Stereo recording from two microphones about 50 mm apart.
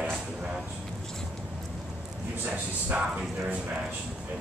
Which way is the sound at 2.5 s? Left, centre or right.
Right.